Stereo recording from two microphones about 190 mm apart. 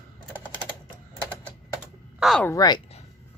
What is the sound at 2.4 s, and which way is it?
Speech, 20° left (ahead or behind).